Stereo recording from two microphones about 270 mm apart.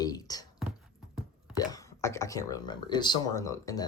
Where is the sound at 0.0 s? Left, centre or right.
Centre.